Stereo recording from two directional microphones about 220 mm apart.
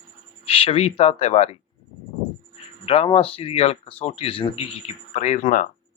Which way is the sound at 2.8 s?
30° left (ahead or behind).